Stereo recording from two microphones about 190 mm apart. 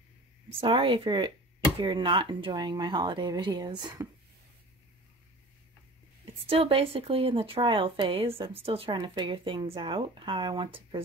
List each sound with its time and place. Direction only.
0.6 s speech: 25° right (ahead or behind)
6.2 s speech: 30° right (ahead or behind)